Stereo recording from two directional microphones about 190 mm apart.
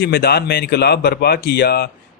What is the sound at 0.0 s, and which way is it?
Speech, 55° left (ahead or behind).